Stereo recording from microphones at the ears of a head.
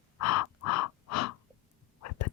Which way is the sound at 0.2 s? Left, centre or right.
Left.